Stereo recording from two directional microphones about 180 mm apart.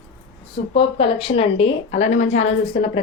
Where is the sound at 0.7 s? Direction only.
30° left (ahead or behind).